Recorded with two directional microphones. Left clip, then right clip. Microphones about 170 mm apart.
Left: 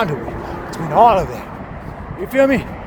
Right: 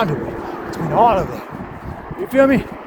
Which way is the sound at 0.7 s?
45° left (ahead or behind).